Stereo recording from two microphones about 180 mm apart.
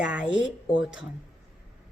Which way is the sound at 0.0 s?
5° right (ahead or behind).